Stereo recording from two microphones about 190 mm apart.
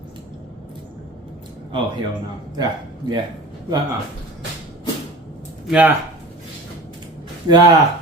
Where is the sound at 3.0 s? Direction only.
30° left (ahead or behind).